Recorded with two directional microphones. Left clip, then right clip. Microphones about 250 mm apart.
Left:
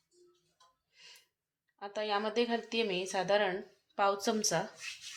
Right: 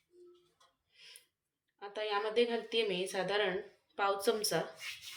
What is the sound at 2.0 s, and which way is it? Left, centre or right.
Speech, left.